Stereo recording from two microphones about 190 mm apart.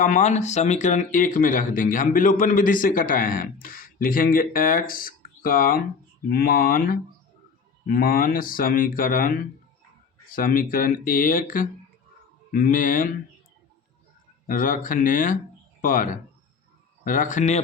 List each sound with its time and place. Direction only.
0.0 s speech: 40° left (ahead or behind)
14.4 s speech: 45° left (ahead or behind)